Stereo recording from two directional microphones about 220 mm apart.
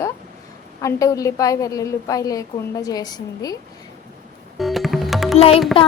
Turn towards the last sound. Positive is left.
turn(degrees=25)  # may be behind; listen again after turning